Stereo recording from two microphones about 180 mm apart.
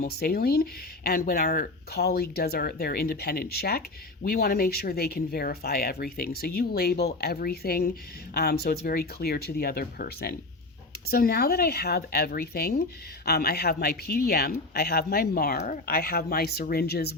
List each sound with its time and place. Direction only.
0.0 s speech: 60° left (ahead or behind)
15.5 s speech: 45° left (ahead or behind); by 17.2 s 60° left (ahead or behind)